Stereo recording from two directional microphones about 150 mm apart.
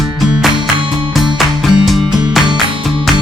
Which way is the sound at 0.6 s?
35° right (ahead or behind).